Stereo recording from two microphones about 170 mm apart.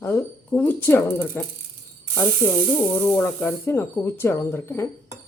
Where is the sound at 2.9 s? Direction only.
5° left (ahead or behind).